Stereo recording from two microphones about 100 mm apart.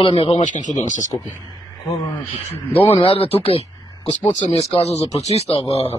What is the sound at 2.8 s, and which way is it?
Speech, 70° left (ahead or behind).